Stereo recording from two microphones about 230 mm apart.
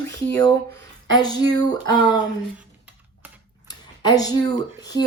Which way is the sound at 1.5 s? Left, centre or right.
Centre.